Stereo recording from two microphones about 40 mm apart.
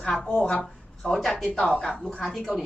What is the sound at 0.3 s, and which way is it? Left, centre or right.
Speech, left.